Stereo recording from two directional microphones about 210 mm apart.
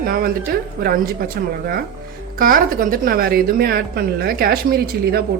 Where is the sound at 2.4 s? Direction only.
40° right (ahead or behind).